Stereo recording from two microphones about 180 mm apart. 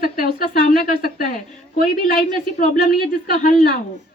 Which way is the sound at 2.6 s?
50° left (ahead or behind).